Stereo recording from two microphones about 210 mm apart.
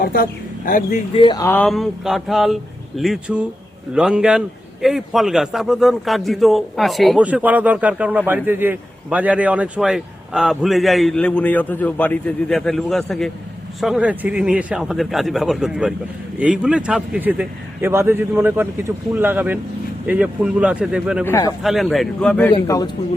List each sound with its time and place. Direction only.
0.0 s speech: 45° left (ahead or behind)
1.1 s speech: 20° left (ahead or behind)
1.5 s a man's voice: 5° left (ahead or behind)
21.2 s a man's voice: 15° left (ahead or behind)
21.6 s a man's voice: centre (ahead or behind)
22.5 s a man's voice: 15° left (ahead or behind)